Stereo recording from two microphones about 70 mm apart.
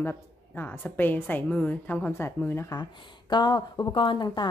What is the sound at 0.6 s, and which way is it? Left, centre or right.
A woman's voice, left.